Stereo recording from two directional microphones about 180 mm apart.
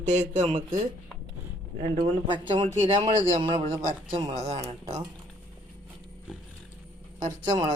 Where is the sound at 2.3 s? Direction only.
25° right (ahead or behind).